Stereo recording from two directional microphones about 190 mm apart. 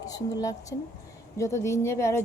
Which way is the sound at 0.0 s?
20° left (ahead or behind).